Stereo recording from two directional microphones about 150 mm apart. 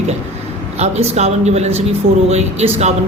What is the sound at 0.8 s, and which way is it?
Speech, 45° right (ahead or behind).